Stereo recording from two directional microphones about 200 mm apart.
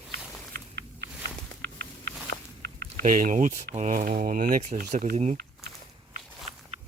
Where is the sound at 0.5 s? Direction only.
55° right (ahead or behind).